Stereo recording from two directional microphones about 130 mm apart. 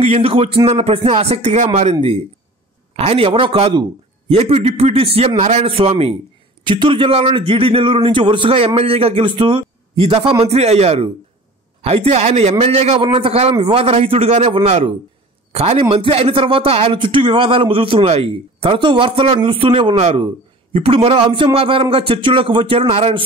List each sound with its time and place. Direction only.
0.0 s a man's voice: 50° right (ahead or behind)
6.6 s a man's voice: 35° right (ahead or behind)